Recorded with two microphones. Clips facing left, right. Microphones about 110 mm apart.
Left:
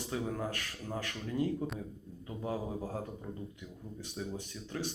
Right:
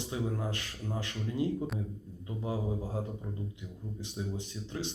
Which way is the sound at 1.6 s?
Centre (ahead or behind).